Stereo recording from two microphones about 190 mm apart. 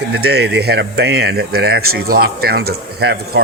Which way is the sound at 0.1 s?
60° right (ahead or behind).